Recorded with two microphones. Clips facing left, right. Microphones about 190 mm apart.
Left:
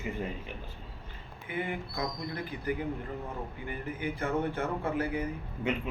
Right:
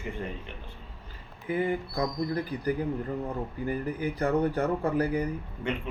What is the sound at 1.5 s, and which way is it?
Speech, 35° right (ahead or behind).